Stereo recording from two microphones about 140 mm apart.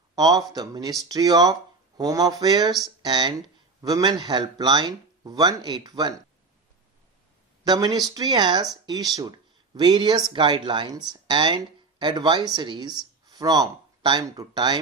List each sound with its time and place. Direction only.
0.2 s speech: 25° right (ahead or behind)
7.6 s speech: 30° right (ahead or behind)